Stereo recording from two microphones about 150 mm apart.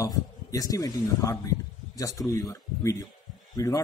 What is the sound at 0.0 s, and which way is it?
Speech, 25° left (ahead or behind).